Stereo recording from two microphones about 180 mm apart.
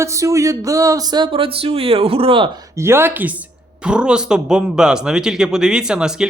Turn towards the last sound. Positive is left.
turn(degrees=-5)  # may be behind; listen again after turning